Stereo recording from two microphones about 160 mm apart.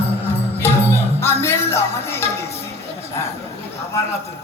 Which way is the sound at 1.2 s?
15° left (ahead or behind).